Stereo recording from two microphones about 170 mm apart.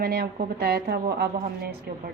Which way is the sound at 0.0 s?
65° right (ahead or behind).